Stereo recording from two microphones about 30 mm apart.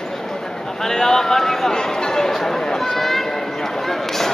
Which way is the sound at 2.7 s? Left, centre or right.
Centre.